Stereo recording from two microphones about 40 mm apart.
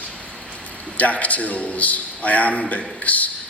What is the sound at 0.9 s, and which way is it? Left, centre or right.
A man's voice, left.